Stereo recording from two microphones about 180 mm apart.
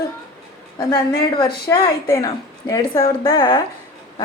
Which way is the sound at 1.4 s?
20° left (ahead or behind).